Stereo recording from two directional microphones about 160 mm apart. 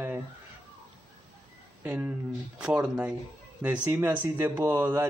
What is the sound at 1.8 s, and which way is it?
A man's voice, 10° right (ahead or behind).